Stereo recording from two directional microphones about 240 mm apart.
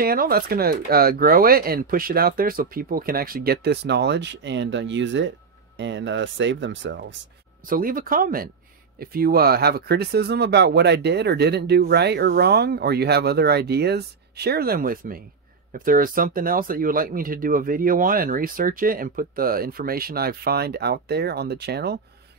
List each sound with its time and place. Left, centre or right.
0.0 s speech: right
7.7 s speech: right